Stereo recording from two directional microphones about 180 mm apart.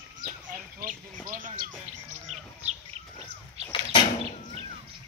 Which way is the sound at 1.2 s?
50° right (ahead or behind).